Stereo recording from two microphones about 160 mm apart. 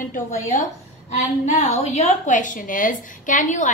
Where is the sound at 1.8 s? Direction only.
45° left (ahead or behind).